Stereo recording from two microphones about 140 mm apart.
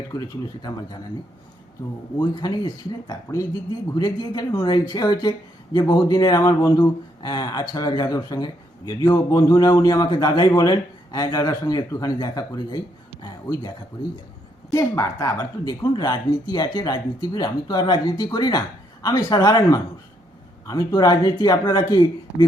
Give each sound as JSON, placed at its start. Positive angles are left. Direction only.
{"t": 0.1, "sound": "a man's voice", "side_deg": 30}
{"t": 2.1, "sound": "a man's voice", "side_deg": 30}